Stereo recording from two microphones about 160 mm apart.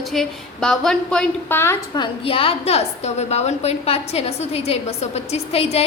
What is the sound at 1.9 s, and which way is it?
A woman's voice, 30° left (ahead or behind).